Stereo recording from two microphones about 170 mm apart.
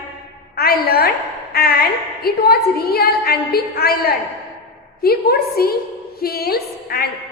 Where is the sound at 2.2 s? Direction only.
65° left (ahead or behind).